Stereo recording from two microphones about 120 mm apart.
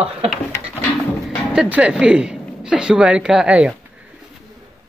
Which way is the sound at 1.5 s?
10° right (ahead or behind).